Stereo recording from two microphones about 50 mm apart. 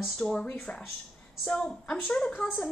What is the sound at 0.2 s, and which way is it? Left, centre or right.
Speech, centre.